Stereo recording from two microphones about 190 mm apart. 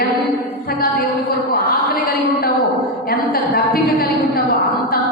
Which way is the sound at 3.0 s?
50° left (ahead or behind).